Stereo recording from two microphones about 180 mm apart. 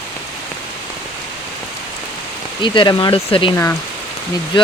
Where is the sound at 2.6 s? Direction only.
25° left (ahead or behind).